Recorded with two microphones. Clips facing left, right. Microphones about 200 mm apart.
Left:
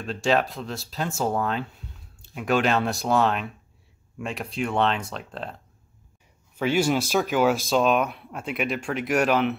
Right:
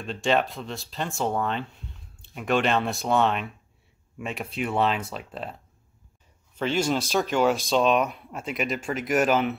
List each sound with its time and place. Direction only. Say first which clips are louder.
0.0 s speech: left 1 dB; centre (ahead or behind)
6.5 s speech: left 2 dB; 10° left (ahead or behind)